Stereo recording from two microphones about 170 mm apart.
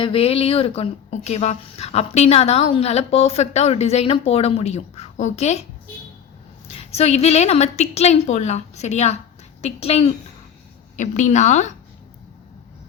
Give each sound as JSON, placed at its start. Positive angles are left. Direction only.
{"t": 0.0, "sound": "speech", "side_deg": 35}
{"t": 6.7, "sound": "a woman's voice", "side_deg": 35}